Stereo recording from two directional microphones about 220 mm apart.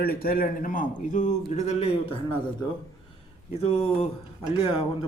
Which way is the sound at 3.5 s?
25° left (ahead or behind).